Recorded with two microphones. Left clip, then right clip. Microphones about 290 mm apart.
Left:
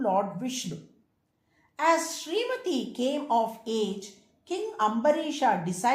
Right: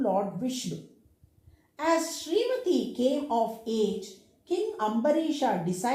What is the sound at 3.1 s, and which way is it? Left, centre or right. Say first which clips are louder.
Speech: left 2 dB; centre.